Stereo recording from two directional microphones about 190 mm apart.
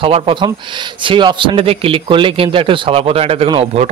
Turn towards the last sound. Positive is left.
turn(degrees=-30)  # may be behind; listen again after turning